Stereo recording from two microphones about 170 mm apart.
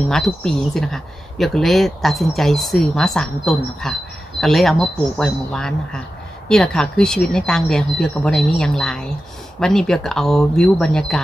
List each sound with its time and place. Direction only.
0.1 s speech: 5° left (ahead or behind)